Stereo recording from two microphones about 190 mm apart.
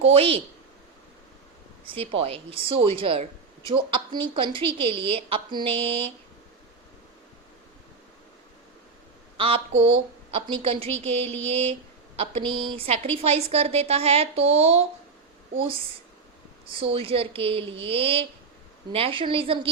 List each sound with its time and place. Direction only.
0.0 s a woman's voice: 30° right (ahead or behind)
2.0 s a woman's voice: 30° right (ahead or behind)
9.4 s a woman's voice: 30° right (ahead or behind)